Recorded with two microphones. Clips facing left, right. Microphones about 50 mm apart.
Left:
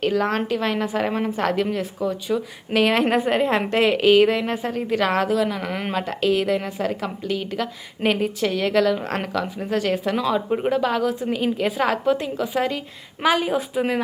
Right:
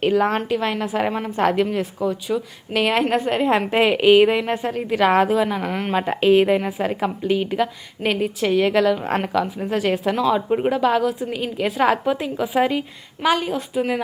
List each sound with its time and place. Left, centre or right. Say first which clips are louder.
0.0 s a woman's voice: right 3 dB; centre
1.4 s a woman's voice: right 6 dB; centre
3.7 s a woman's voice: right 2 dB; centre
5.9 s a woman's voice: right 6 dB; centre
6.6 s a woman's voice: right 3 dB; centre
6.8 s a woman's voice: right 4 dB; centre
8.0 s a woman's voice: even; centre
13.2 s a woman's voice: even; centre